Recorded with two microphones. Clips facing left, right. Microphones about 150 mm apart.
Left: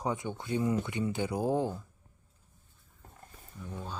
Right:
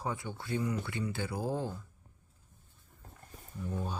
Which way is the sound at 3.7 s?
10° right (ahead or behind).